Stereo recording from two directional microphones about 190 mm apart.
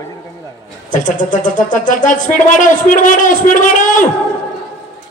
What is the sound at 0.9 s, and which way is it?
Speech, 45° left (ahead or behind).